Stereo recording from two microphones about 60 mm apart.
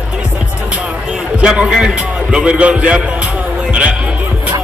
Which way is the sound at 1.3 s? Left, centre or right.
Centre.